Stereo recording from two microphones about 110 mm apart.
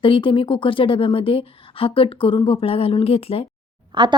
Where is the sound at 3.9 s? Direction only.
45° right (ahead or behind).